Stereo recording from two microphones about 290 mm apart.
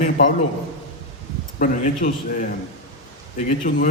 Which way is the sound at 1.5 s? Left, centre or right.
Left.